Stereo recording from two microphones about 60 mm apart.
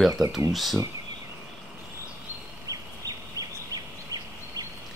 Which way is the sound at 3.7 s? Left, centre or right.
Right.